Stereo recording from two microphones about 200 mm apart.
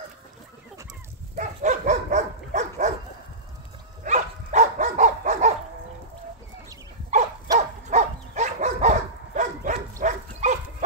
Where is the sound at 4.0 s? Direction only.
35° right (ahead or behind).